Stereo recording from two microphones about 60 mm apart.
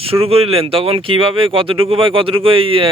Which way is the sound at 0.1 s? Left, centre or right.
Right.